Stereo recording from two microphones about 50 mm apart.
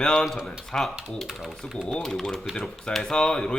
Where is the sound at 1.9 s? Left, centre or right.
Centre.